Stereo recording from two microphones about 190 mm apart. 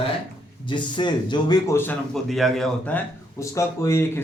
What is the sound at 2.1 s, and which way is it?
Speech, centre (ahead or behind).